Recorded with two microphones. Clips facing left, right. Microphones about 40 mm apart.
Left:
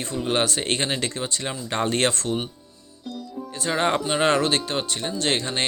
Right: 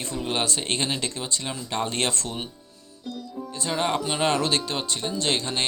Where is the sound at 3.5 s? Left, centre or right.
Left.